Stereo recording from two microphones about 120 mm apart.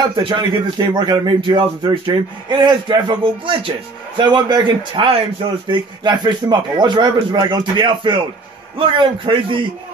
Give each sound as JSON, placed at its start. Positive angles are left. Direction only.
{"t": 0.0, "sound": "a man's voice", "side_deg": -35}